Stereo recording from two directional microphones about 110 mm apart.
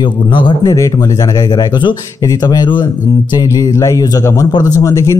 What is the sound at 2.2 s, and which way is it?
Speech, 35° left (ahead or behind).